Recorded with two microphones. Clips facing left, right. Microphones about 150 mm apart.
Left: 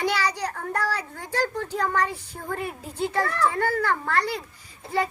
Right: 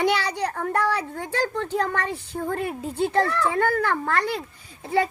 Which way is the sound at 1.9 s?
55° right (ahead or behind).